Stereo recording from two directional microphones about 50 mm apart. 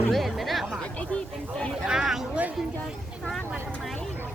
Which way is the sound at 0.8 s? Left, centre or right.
Left.